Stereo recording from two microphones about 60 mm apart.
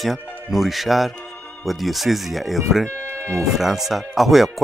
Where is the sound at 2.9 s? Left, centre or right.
Right.